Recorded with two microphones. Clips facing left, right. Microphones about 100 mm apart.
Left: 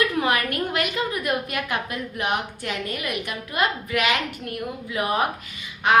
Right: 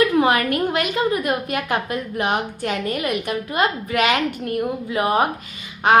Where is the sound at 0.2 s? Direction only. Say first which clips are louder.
Right 5 dB; 30° right (ahead or behind).